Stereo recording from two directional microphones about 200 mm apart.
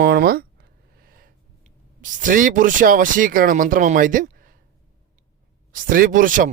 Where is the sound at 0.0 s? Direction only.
50° right (ahead or behind).